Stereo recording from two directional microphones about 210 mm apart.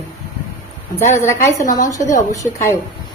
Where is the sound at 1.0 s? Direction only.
35° left (ahead or behind).